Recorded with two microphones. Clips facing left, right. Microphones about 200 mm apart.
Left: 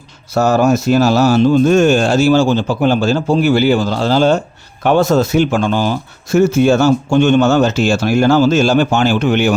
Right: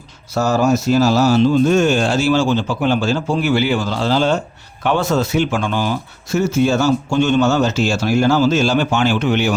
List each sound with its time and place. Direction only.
0.3 s speech: 60° left (ahead or behind); by 5.9 s 40° left (ahead or behind)
6.3 s speech: 55° left (ahead or behind)